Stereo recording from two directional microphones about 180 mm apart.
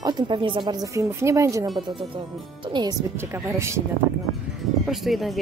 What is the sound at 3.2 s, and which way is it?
Speech, 15° right (ahead or behind).